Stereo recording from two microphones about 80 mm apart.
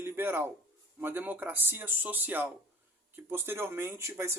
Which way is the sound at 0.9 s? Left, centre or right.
Right.